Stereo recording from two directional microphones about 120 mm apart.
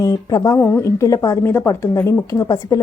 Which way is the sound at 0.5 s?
15° left (ahead or behind).